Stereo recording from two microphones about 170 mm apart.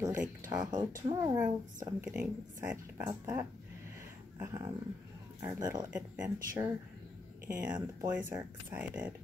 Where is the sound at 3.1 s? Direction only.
20° right (ahead or behind).